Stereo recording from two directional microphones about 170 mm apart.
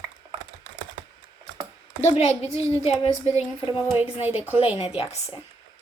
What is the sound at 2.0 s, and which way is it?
A woman's voice, 40° left (ahead or behind).